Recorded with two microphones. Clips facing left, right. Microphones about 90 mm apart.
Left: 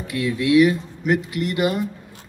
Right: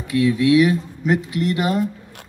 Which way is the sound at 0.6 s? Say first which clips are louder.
Left 1 dB; centre (ahead or behind).